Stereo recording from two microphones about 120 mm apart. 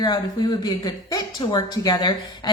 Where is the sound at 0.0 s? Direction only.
35° left (ahead or behind).